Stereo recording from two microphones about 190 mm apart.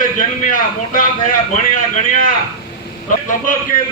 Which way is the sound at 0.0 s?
45° left (ahead or behind).